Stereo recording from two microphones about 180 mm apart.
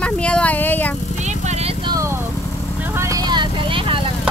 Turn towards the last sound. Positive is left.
turn(degrees=-25)  # may be behind; listen again after turning